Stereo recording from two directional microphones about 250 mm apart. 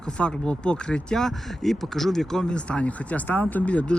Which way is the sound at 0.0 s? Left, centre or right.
Centre.